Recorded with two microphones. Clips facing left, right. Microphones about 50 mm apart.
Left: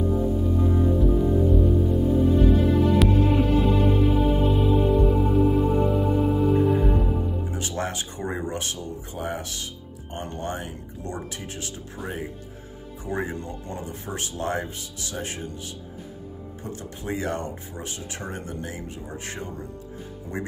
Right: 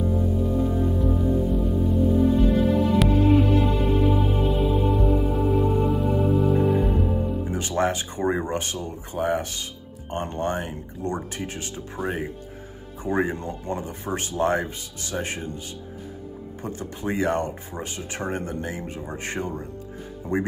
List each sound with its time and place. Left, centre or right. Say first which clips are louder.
0.5 s music: left 1 dB; centre
7.5 s speech: right 9 dB; right
12.0 s speech: right 5 dB; right
16.6 s speech: right 4 dB; right